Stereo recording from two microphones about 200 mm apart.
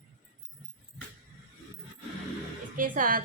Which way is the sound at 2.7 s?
40° right (ahead or behind).